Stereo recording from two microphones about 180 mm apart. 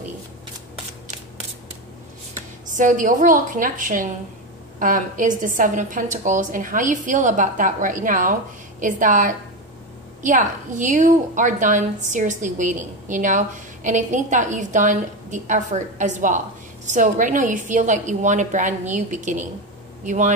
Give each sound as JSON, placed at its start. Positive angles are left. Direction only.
{"t": 2.7, "sound": "a woman's voice", "side_deg": -45}